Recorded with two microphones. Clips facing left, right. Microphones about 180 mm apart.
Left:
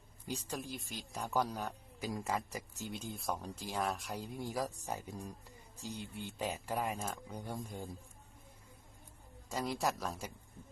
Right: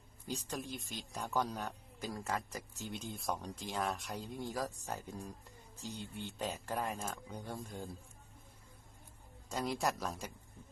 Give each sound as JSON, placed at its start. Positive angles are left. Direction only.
{"t": 0.3, "sound": "speech", "side_deg": 10}
{"t": 0.5, "sound": "speech", "side_deg": 0}
{"t": 4.2, "sound": "speech", "side_deg": 10}
{"t": 6.4, "sound": "speech", "side_deg": 15}
{"t": 9.5, "sound": "speech", "side_deg": 0}